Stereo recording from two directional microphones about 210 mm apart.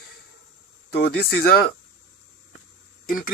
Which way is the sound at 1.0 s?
45° left (ahead or behind).